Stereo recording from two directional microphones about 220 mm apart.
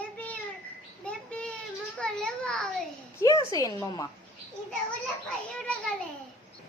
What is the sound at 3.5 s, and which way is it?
Speech, 15° left (ahead or behind).